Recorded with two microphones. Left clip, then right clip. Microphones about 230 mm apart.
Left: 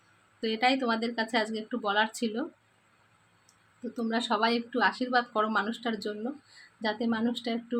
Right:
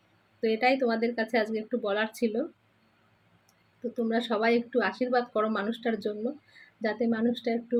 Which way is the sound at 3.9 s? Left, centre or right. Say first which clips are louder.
Right 1 dB; centre.